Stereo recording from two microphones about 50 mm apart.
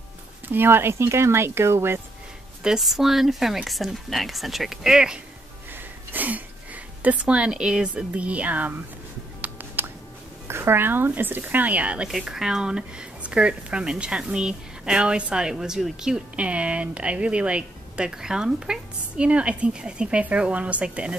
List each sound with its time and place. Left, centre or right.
0.5 s speech: right
2.8 s speech: centre
5.7 s a sound: right; by 7.9 s centre
7.9 s speech: right
9.8 s music: right
10.5 s speech: right
12.1 s speech: centre
16.3 s speech: right